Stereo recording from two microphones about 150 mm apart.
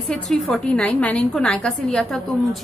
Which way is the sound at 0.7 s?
10° left (ahead or behind).